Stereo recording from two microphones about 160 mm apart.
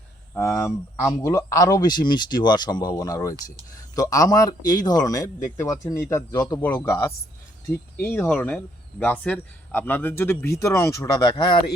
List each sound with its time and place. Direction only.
0.3 s speech: 15° left (ahead or behind)